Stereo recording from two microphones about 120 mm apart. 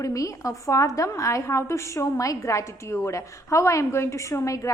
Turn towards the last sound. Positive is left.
turn(degrees=25)  # may be behind; listen again after turning